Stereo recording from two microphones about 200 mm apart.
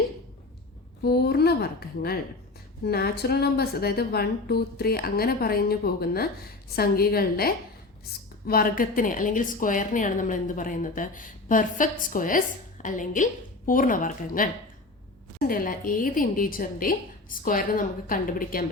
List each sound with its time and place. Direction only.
1.0 s a woman's voice: 50° left (ahead or behind)
2.8 s a woman's voice: 50° left (ahead or behind)